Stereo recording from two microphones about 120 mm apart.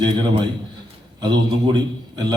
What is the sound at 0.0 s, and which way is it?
A man's voice, 40° right (ahead or behind).